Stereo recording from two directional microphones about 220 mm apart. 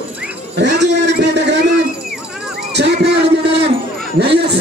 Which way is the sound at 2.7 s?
50° right (ahead or behind).